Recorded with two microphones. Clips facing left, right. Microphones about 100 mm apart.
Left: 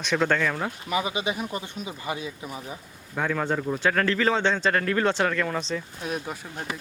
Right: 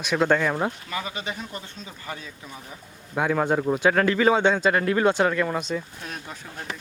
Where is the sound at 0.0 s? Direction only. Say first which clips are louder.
Right 2 dB; 10° right (ahead or behind).